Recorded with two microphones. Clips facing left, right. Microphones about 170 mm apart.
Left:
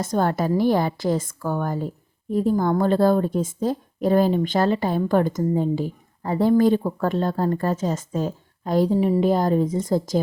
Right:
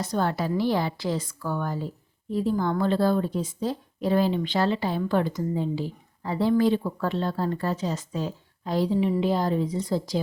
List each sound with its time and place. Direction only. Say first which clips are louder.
0.0 s a woman's voice: left 4 dB; 50° left (ahead or behind)